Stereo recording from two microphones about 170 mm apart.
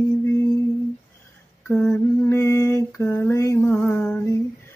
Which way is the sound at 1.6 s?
5° left (ahead or behind).